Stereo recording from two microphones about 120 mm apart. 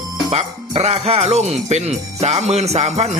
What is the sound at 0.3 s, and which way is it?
Speech, 60° right (ahead or behind).